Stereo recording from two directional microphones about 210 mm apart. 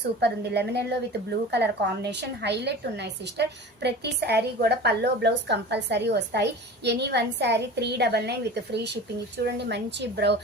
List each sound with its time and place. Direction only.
0.2 s a woman's voice: 50° right (ahead or behind)